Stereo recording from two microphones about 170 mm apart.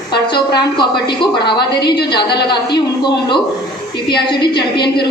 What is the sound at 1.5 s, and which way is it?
Speech, 75° left (ahead or behind).